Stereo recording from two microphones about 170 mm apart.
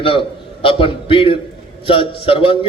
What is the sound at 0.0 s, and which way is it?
A man's voice, 30° left (ahead or behind).